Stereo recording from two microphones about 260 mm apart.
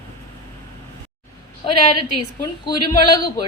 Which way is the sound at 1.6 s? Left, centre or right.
Centre.